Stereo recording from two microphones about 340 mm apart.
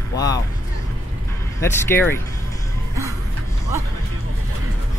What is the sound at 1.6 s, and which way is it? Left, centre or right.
Speech, centre.